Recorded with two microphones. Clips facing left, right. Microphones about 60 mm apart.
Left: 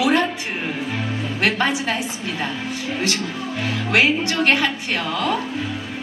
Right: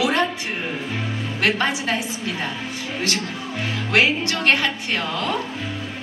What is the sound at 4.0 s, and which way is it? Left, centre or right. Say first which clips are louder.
A woman's voice: left 1 dB; left.